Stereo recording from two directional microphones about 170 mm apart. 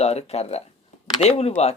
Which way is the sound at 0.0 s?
40° left (ahead or behind).